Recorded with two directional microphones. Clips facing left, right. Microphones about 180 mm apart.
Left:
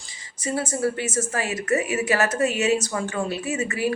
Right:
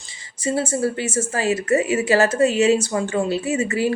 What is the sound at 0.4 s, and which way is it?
A woman's voice, 30° right (ahead or behind).